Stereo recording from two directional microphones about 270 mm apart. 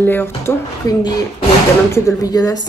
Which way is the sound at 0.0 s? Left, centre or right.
Centre.